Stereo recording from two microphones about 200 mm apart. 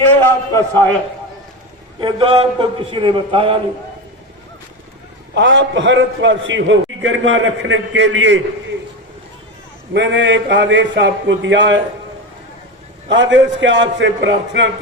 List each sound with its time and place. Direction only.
0.1 s a man's voice: 10° left (ahead or behind)
2.0 s a man's voice: 25° right (ahead or behind)
5.3 s a man's voice: 65° right (ahead or behind)
9.9 s a man's voice: 60° right (ahead or behind)
13.1 s a man's voice: 65° right (ahead or behind)